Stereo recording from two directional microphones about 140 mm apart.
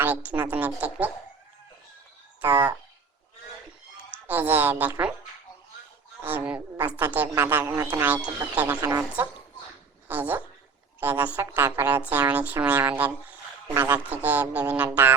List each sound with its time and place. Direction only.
0.0 s a woman's voice: 10° right (ahead or behind)
2.4 s a woman's voice: 15° right (ahead or behind)
4.3 s a woman's voice: 15° right (ahead or behind)
6.2 s a woman's voice: 10° right (ahead or behind)
8.6 s speech: 20° right (ahead or behind)
10.1 s a woman's voice: 10° right (ahead or behind)